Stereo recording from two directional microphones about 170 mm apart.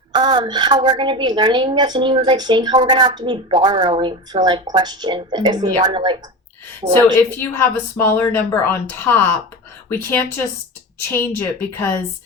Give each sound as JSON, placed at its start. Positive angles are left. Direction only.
{"t": 0.1, "sound": "a woman's voice", "side_deg": -25}
{"t": 6.8, "sound": "a woman's voice", "side_deg": -40}
{"t": 7.3, "sound": "speech", "side_deg": 15}